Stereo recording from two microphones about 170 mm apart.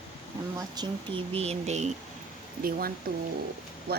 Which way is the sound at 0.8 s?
35° right (ahead or behind).